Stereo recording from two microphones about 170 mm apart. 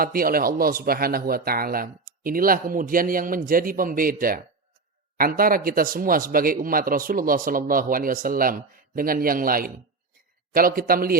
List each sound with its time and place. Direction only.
0.0 s a man's voice: 60° right (ahead or behind)